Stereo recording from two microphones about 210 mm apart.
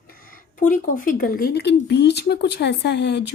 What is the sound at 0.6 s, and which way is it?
Speech, 40° left (ahead or behind).